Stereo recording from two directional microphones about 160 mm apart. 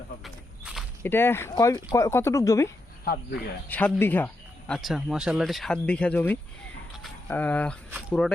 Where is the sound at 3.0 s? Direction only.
70° left (ahead or behind).